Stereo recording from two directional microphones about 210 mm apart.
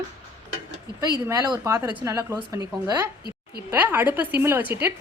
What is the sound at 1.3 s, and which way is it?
A woman's voice, 15° right (ahead or behind).